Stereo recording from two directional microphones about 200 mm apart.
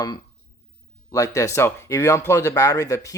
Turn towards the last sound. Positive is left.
turn(degrees=15)  # may be behind; listen again after turning